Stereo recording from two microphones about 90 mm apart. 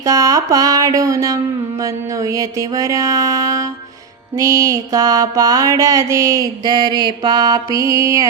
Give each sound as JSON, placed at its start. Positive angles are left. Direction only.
{"t": 0.0, "sound": "mantra", "side_deg": -40}